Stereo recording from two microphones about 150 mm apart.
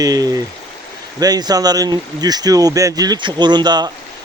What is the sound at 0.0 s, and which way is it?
Speech, 25° right (ahead or behind).